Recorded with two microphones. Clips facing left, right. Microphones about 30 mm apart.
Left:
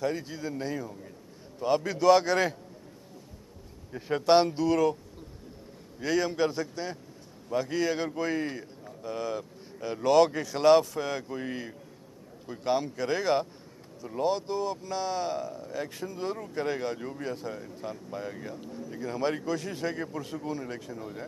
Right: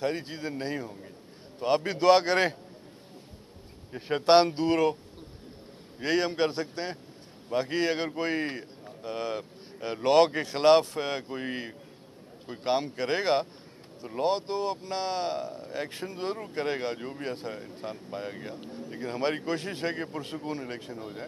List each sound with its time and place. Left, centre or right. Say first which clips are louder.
0.0 s speech: even; right
3.9 s speech: right 1 dB; right
5.9 s speech: right 1 dB; right